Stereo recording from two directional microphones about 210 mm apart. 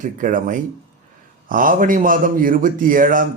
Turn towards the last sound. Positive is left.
turn(degrees=-40)  # may be behind; listen again after turning